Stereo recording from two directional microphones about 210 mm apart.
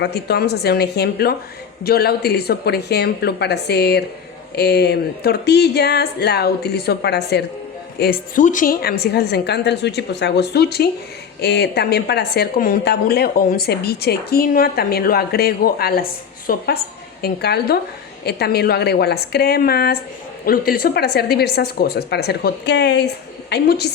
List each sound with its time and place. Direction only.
0.0 s speech: 50° left (ahead or behind)